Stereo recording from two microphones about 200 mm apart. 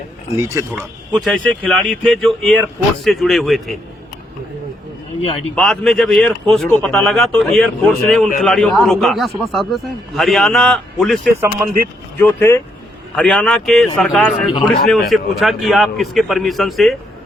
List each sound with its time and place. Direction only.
0.3 s speech: 15° right (ahead or behind)
1.1 s a man's voice: 5° left (ahead or behind)
5.2 s speech: 30° left (ahead or behind)
5.5 s a man's voice: 5° left (ahead or behind)